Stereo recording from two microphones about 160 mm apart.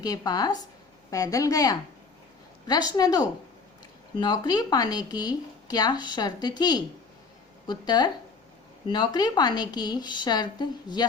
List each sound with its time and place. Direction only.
0.0 s speech: 25° left (ahead or behind)